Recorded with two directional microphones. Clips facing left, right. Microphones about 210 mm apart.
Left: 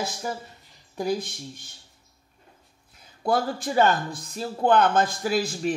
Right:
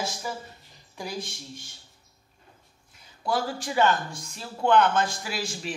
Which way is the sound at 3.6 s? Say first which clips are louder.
Left 2 dB; 40° left (ahead or behind).